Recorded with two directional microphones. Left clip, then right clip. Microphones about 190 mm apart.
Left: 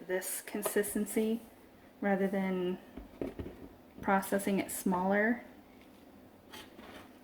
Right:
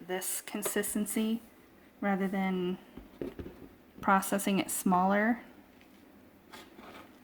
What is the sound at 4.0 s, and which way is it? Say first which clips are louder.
A woman's voice: right 3 dB; 55° right (ahead or behind).